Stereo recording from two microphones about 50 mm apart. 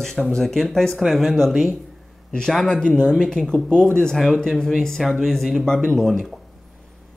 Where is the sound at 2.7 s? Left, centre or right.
Centre.